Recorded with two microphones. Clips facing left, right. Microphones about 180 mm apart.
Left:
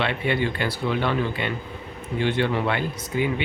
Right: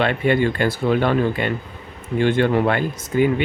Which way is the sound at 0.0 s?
50° right (ahead or behind).